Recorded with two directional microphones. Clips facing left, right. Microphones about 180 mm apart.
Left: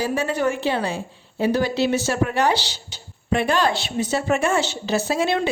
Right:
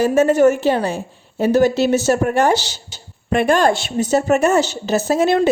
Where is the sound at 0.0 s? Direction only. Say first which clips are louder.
Right 9 dB; 45° right (ahead or behind).